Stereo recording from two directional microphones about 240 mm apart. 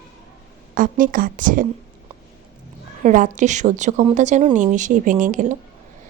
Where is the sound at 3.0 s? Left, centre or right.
Right.